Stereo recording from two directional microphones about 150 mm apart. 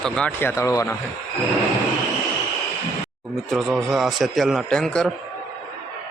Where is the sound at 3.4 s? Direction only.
Centre (ahead or behind).